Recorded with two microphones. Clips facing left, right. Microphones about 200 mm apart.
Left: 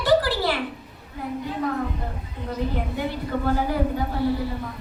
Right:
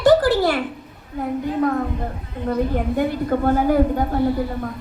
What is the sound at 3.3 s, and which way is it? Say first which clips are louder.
Speech: right 7 dB; 50° right (ahead or behind).